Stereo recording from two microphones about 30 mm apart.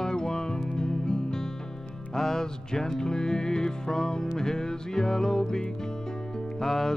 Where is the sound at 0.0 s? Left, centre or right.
Centre.